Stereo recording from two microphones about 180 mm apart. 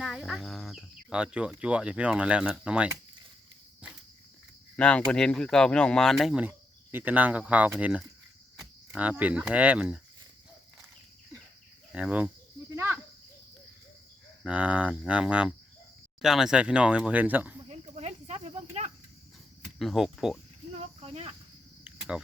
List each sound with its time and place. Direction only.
0.0 s speech: centre (ahead or behind)
4.8 s speech: 5° left (ahead or behind)
8.5 s cricket: 5° right (ahead or behind)
9.4 s speech: 5° right (ahead or behind)
11.9 s speech: 5° right (ahead or behind)
12.7 s cricket: 15° right (ahead or behind)
14.4 s speech: 5° right (ahead or behind)
17.7 s snake: 35° right (ahead or behind)
19.8 s speech: centre (ahead or behind)
20.7 s cricket: 35° right (ahead or behind)
21.8 s cricket: 5° right (ahead or behind)